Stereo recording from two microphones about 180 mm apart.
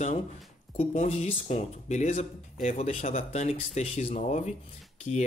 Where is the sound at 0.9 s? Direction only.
40° left (ahead or behind).